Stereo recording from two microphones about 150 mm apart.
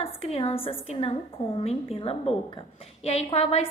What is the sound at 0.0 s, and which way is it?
A woman's voice, 40° left (ahead or behind).